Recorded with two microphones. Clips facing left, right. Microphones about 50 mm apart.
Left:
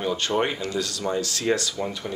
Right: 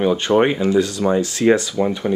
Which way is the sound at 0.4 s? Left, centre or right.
Right.